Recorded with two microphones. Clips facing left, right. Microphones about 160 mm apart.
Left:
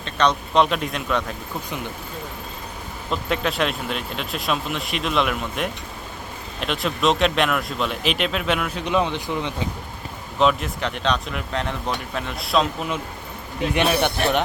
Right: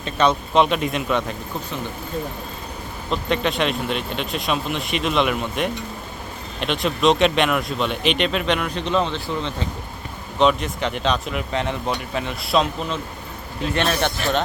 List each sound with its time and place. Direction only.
0.0 s speech: 5° right (ahead or behind)
3.1 s speech: 5° left (ahead or behind)
10.3 s speech: centre (ahead or behind)
13.6 s a man's voice: 10° left (ahead or behind)